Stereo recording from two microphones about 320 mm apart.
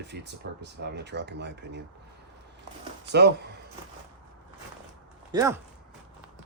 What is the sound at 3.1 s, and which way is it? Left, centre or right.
Speech, right.